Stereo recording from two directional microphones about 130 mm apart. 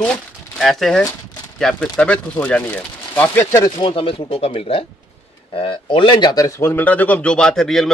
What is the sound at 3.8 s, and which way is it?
Speech, 45° left (ahead or behind).